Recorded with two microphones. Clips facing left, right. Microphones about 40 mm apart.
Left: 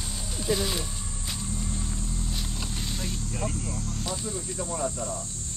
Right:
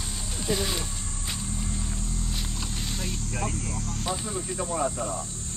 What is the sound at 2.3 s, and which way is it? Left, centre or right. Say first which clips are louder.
Vehicle: even; centre.